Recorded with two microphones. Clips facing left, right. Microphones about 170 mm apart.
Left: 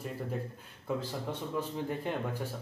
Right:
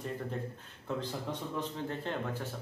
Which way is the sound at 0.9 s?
10° left (ahead or behind).